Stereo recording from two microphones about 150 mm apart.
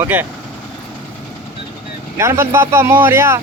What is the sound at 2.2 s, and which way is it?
Speech, 15° right (ahead or behind).